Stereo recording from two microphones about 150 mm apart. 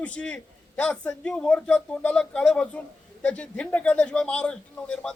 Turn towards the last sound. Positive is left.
turn(degrees=5)  # may be behind; listen again after turning